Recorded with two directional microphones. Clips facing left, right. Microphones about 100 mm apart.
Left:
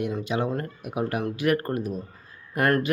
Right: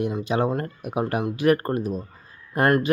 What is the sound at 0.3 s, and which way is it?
Speech, 35° right (ahead or behind).